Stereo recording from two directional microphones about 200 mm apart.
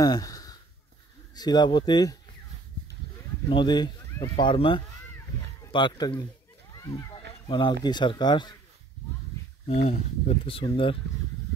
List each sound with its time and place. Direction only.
0.0 s a sound: 20° left (ahead or behind)
1.3 s speech: 20° left (ahead or behind)
3.4 s speech: 20° left (ahead or behind)
7.0 s a sound: 25° left (ahead or behind)
7.8 s speech: 20° left (ahead or behind)
9.7 s speech: 30° left (ahead or behind)